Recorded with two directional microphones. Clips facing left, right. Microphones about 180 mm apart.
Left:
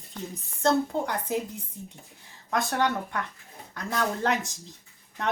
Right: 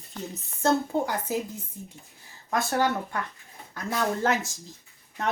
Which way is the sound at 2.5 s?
5° right (ahead or behind).